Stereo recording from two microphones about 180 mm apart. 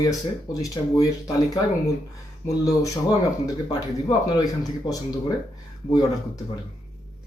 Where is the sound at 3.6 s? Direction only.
20° left (ahead or behind).